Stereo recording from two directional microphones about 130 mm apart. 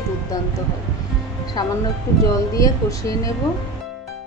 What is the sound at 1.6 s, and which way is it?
A woman's voice, 25° left (ahead or behind).